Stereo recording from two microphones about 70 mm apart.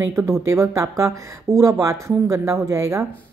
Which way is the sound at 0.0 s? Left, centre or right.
Right.